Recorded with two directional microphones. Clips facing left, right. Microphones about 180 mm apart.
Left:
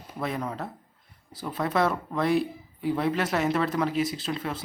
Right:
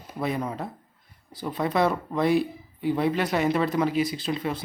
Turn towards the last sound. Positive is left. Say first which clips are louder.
# right 3 dB
turn(degrees=0)  # may be behind; listen again after turning